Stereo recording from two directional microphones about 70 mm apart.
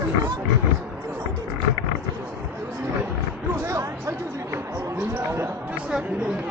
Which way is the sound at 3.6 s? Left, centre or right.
Right.